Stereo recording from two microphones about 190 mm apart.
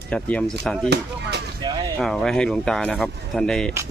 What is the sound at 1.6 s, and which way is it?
Speech, 25° right (ahead or behind).